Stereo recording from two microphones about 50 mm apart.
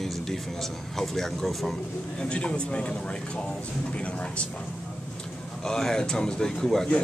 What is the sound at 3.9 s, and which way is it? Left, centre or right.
Speech, left.